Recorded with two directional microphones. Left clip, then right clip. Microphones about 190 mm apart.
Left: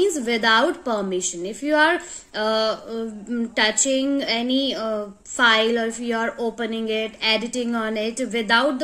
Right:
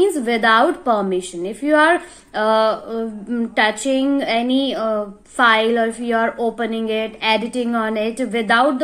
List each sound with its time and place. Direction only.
0.0 s a woman's voice: 15° left (ahead or behind)